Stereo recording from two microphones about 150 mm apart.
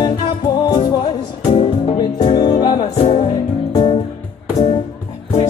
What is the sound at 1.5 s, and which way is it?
Music, 45° left (ahead or behind).